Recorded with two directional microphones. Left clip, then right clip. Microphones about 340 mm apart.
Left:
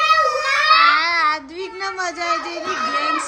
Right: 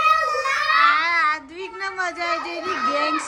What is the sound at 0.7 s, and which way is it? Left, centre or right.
Speech, centre.